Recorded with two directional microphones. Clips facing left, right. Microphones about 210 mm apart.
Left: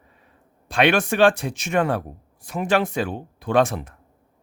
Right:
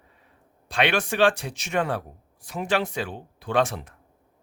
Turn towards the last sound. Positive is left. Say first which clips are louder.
# left 4 dB
turn(degrees=50)  # may be behind; listen again after turning